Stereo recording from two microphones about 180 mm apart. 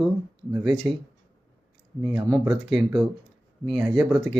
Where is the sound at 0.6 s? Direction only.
Centre (ahead or behind).